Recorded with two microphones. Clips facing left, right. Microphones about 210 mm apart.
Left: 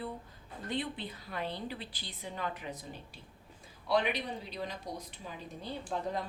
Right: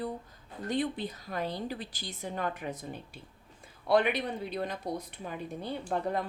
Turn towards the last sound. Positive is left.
turn(degrees=-55)  # may be behind; listen again after turning